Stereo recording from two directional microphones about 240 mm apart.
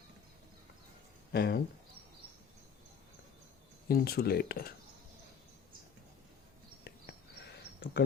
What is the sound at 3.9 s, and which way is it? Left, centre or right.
Speech, left.